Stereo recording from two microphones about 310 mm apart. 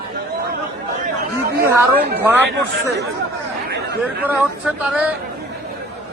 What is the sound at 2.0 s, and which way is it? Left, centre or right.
Speech, right.